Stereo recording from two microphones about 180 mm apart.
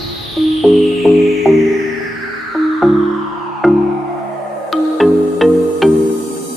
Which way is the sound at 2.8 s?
Centre (ahead or behind).